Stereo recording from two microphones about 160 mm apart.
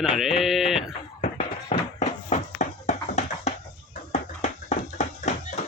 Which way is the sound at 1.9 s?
50° left (ahead or behind).